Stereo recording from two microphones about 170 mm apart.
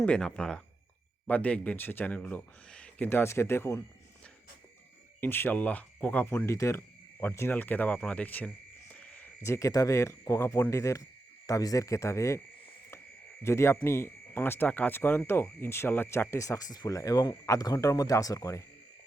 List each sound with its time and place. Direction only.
0.0 s speech: 5° left (ahead or behind)
5.2 s speech: 10° left (ahead or behind)
13.4 s speech: 15° left (ahead or behind)